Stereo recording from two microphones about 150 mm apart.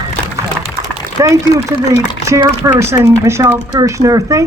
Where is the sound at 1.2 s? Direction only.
20° right (ahead or behind).